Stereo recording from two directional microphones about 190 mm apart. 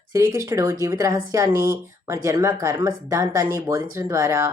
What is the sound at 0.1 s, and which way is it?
A woman's voice, 15° right (ahead or behind).